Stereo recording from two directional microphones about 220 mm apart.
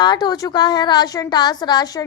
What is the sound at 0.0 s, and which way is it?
A woman's voice, 20° left (ahead or behind).